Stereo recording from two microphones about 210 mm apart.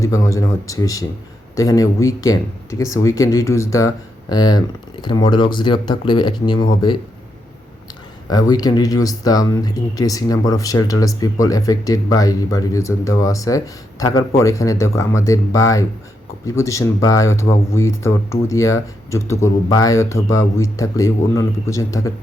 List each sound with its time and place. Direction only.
0.0 s speech: 15° left (ahead or behind)
8.3 s speech: 20° left (ahead or behind)